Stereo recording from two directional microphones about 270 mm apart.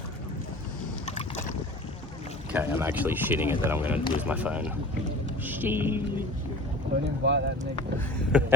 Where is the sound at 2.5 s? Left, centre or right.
Centre.